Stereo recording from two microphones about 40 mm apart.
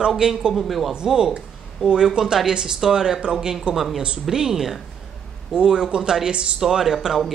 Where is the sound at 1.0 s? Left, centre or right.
Centre.